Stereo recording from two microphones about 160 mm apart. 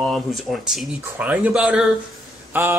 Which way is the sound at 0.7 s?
10° right (ahead or behind).